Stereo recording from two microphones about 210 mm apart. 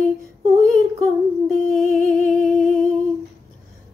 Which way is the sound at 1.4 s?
Centre (ahead or behind).